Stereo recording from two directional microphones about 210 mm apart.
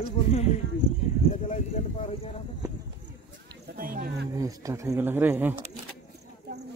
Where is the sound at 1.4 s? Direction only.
30° left (ahead or behind).